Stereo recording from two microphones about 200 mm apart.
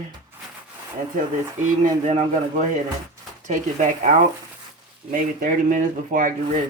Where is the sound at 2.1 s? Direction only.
35° right (ahead or behind).